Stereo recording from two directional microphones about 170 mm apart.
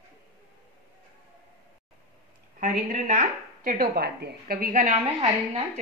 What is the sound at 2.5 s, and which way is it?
A woman's voice, 50° right (ahead or behind).